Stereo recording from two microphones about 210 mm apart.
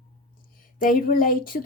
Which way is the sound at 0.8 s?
40° left (ahead or behind).